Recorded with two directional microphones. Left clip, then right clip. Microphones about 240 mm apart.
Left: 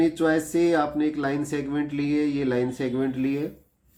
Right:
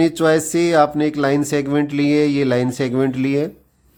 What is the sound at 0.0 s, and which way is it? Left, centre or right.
Speech, right.